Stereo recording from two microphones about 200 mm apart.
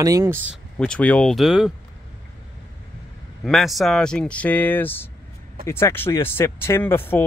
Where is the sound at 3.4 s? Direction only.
Centre (ahead or behind).